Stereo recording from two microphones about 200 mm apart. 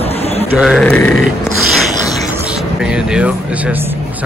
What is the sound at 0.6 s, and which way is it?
Speech, centre (ahead or behind).